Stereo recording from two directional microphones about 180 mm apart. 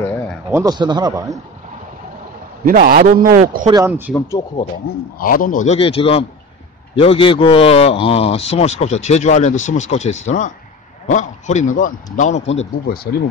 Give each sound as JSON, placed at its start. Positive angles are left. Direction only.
{"t": 0.5, "sound": "a man's voice", "side_deg": -20}
{"t": 2.6, "sound": "a man's voice", "side_deg": -50}
{"t": 3.6, "sound": "speech", "side_deg": -20}
{"t": 5.2, "sound": "a man's voice", "side_deg": 50}
{"t": 5.8, "sound": "a man's voice", "side_deg": 30}
{"t": 12.8, "sound": "speech", "side_deg": 60}